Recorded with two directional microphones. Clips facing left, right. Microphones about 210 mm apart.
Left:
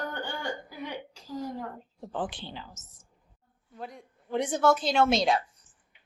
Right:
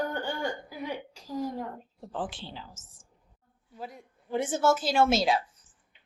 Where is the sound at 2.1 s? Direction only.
Centre (ahead or behind).